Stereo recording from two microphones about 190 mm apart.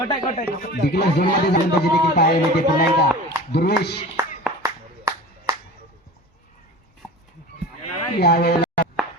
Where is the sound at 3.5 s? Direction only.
55° left (ahead or behind).